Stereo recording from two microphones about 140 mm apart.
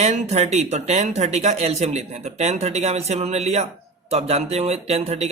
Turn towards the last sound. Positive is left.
turn(degrees=-50)  # may be behind; listen again after turning